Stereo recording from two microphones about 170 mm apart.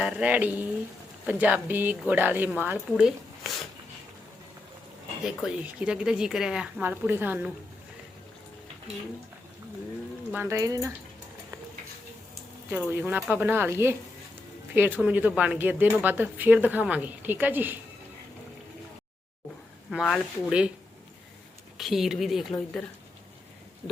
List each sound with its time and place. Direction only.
0.0 s a woman's voice: 10° right (ahead or behind)
5.2 s speech: 5° right (ahead or behind)
10.3 s a woman's voice: 15° right (ahead or behind)
12.7 s a woman's voice: 10° right (ahead or behind)
19.9 s a woman's voice: 5° left (ahead or behind)
21.8 s speech: centre (ahead or behind)